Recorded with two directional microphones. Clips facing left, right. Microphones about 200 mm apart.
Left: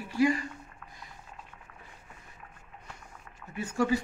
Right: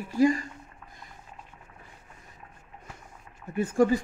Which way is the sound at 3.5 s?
50° right (ahead or behind).